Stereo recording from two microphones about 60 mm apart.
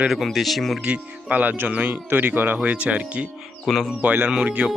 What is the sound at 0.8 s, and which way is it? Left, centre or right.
Speech, right.